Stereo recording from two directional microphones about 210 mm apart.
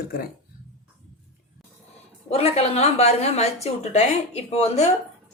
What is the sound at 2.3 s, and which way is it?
A woman's voice, 30° left (ahead or behind).